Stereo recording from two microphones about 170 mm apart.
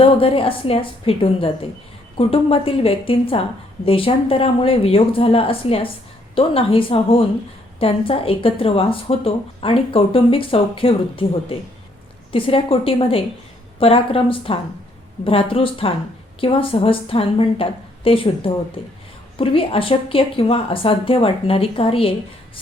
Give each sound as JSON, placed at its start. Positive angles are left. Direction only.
{"t": 0.0, "sound": "speech", "side_deg": 35}